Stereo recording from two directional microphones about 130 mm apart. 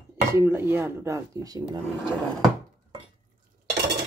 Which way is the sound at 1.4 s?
30° right (ahead or behind).